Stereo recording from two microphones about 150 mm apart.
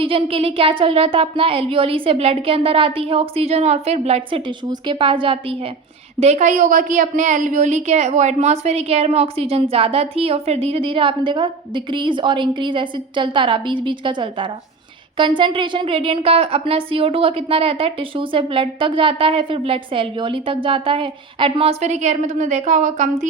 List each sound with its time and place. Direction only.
0.0 s a woman's voice: 40° right (ahead or behind)
6.1 s a woman's voice: 50° right (ahead or behind)